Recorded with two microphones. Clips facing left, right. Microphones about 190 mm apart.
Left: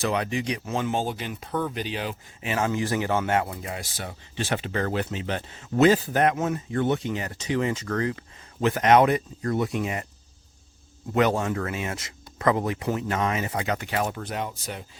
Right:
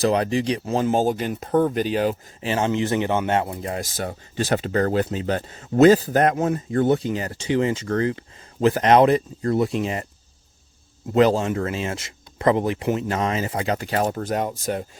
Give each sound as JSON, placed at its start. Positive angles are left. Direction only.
{"t": 0.0, "sound": "speech", "side_deg": -35}
{"t": 2.4, "sound": "a man's voice", "side_deg": -30}
{"t": 3.6, "sound": "speech", "side_deg": -40}
{"t": 11.1, "sound": "speech", "side_deg": -30}